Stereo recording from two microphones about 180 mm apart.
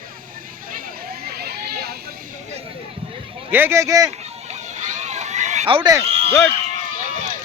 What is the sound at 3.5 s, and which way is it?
Speech, 10° right (ahead or behind).